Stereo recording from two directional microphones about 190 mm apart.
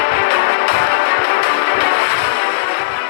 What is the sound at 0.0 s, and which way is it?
Music, 90° left.